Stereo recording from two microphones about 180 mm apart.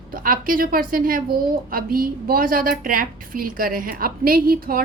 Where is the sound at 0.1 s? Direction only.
50° right (ahead or behind).